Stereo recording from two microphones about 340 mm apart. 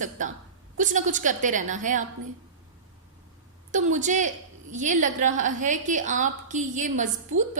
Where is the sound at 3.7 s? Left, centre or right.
Right.